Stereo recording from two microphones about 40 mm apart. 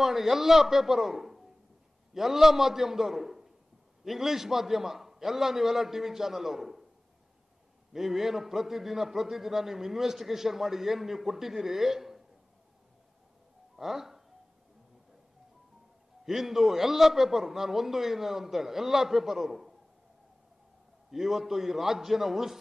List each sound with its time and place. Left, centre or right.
0.0 s a man's voice: centre
7.9 s a man's voice: centre
13.7 s speech: centre
16.3 s a man's voice: centre
21.1 s a man's voice: centre